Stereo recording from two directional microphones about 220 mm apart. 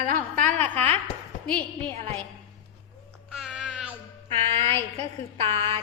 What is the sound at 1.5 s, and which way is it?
Speech, 10° left (ahead or behind).